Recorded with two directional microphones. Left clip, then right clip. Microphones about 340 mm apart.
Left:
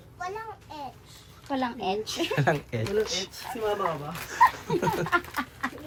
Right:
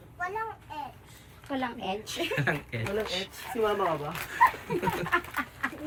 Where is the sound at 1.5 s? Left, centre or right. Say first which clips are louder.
Left 4 dB; left.